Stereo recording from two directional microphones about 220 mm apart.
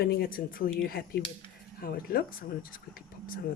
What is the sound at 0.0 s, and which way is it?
Speech, 45° left (ahead or behind).